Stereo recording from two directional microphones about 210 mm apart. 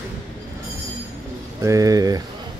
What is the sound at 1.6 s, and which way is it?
Speech, 15° right (ahead or behind).